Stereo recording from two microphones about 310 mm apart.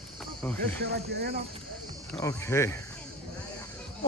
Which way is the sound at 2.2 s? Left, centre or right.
Centre.